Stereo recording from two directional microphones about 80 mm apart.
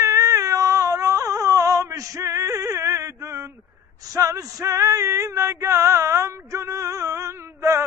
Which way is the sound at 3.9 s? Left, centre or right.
Right.